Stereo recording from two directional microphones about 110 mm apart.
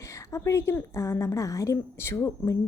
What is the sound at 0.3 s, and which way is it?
Speech, 25° left (ahead or behind).